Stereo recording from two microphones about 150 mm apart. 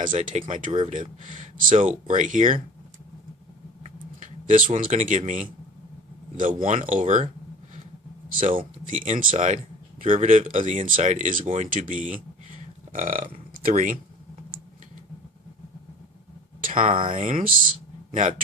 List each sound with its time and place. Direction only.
0.2 s speech: 50° right (ahead or behind)
3.8 s speech: 60° right (ahead or behind)
8.9 s speech: 60° right (ahead or behind)
16.6 s a sound: 60° right (ahead or behind)
16.9 s speech: 35° right (ahead or behind)
17.2 s speech: 60° right (ahead or behind)